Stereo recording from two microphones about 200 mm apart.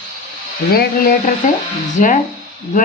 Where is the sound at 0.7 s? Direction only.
50° left (ahead or behind).